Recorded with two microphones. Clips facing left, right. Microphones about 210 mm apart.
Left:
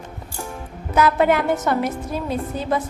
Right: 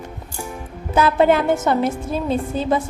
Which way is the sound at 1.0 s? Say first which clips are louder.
Right 2 dB; 30° right (ahead or behind).